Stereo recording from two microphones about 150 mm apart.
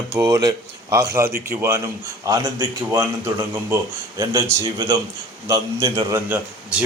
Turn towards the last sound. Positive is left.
turn(degrees=-10)  # may be behind; listen again after turning